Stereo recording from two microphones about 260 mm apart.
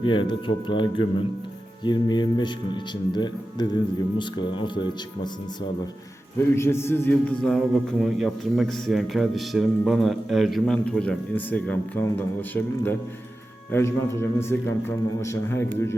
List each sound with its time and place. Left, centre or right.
0.0 s a man's voice: centre
6.6 s a man's voice: centre